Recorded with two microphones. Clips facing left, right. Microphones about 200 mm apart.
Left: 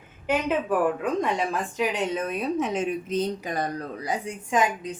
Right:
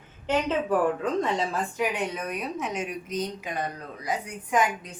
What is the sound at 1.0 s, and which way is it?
A woman's voice, 15° left (ahead or behind).